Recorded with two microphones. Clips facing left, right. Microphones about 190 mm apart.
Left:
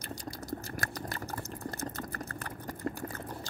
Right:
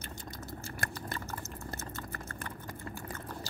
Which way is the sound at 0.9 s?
35° left (ahead or behind).